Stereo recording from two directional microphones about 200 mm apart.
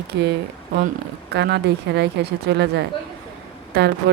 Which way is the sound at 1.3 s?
55° right (ahead or behind).